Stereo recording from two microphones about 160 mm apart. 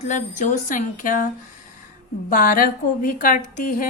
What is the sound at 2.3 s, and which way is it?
A woman's voice, 60° left (ahead or behind).